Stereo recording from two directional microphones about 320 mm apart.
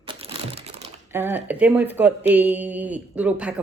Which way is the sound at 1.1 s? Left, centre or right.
Centre.